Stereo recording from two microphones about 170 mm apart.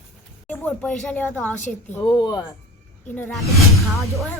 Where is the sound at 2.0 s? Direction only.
20° left (ahead or behind).